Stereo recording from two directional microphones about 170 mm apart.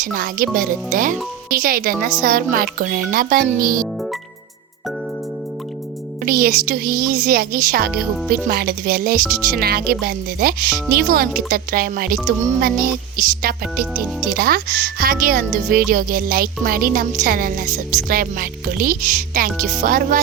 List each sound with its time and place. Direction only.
0.0 s speech: 55° right (ahead or behind)
6.2 s speech: 60° right (ahead or behind)